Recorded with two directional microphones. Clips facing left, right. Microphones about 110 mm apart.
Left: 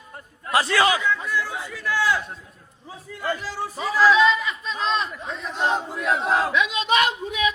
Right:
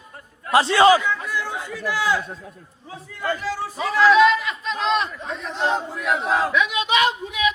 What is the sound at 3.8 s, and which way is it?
Speech, 5° left (ahead or behind).